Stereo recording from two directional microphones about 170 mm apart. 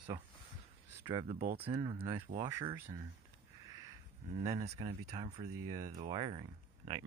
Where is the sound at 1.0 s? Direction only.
30° right (ahead or behind).